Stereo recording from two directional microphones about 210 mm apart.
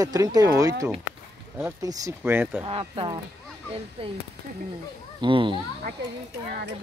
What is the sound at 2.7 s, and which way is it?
Speech, 25° right (ahead or behind).